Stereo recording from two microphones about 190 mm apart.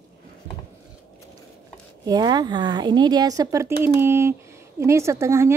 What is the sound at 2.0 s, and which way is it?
Speech, 20° right (ahead or behind).